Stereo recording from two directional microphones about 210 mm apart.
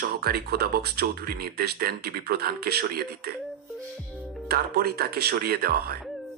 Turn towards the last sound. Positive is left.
turn(degrees=-45)  # may be behind; listen again after turning